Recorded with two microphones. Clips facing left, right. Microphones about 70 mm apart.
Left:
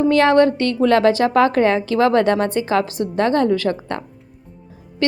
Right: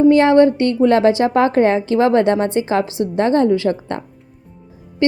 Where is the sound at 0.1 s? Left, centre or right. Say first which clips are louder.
Right 3 dB; right.